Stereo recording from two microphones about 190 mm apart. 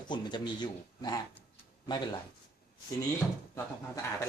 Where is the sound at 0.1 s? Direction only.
25° left (ahead or behind).